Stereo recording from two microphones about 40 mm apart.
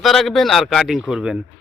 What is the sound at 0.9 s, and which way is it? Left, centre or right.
Speech, centre.